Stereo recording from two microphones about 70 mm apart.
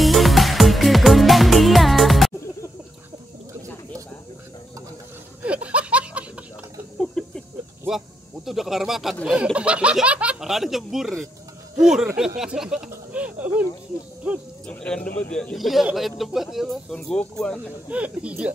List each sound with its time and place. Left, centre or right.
0.0 s music: centre
5.4 s laughter: centre
7.0 s a sound: centre
7.9 s a sound: centre
9.2 s speech: centre
10.0 s a sound: centre
10.4 s speech: centre
13.1 s a sound: right
14.7 s speech: centre
15.5 s speech: centre
16.9 s speech: centre
17.8 s speech: centre